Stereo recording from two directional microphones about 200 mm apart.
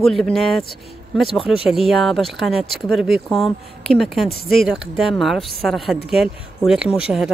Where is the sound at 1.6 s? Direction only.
Centre (ahead or behind).